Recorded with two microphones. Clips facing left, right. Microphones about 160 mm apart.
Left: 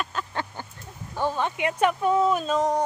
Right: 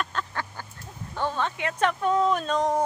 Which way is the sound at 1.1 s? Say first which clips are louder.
Left 2 dB; 10° left (ahead or behind).